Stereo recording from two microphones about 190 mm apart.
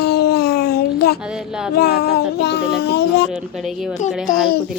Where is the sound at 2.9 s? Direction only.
65° left (ahead or behind).